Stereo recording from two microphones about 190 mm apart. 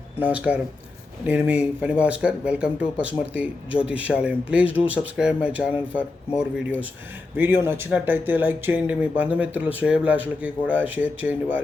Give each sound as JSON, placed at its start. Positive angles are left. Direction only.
{"t": 0.2, "sound": "speech", "side_deg": -10}